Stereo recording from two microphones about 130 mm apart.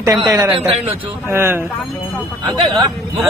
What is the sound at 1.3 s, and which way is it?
Speech, 20° right (ahead or behind).